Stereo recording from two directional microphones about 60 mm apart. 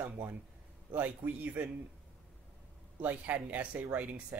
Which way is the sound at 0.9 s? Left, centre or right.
Right.